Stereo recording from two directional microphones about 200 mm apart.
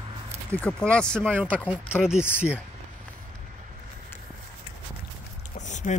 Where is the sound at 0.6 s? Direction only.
5° left (ahead or behind).